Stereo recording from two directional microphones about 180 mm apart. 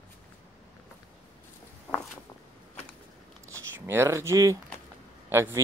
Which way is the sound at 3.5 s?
15° right (ahead or behind).